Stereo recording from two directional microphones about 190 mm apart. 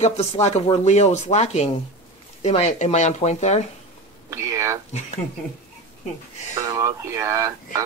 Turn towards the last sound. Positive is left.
turn(degrees=-15)  # may be behind; listen again after turning